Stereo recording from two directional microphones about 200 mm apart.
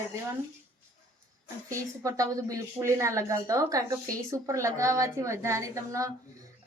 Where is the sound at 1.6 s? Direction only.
15° right (ahead or behind).